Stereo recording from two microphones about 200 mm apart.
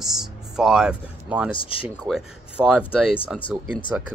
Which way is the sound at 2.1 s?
5° right (ahead or behind).